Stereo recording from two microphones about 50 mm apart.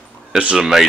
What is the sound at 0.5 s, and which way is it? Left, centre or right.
Speech, centre.